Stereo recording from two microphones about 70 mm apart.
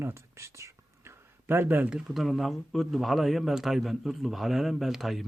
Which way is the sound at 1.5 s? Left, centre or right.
Right.